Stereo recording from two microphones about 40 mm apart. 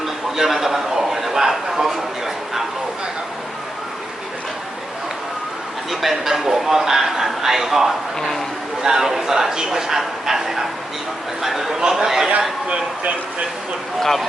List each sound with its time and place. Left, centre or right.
0.0 s a man's voice: centre
5.9 s a man's voice: centre
12.6 s speech: right
14.0 s speech: centre